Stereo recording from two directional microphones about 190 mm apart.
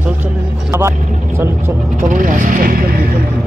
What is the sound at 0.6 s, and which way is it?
Speech, 15° right (ahead or behind).